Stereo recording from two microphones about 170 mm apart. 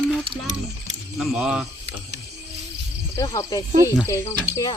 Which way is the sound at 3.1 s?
20° left (ahead or behind).